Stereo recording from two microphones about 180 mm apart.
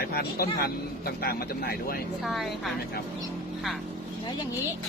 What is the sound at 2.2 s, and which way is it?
Speech, centre (ahead or behind).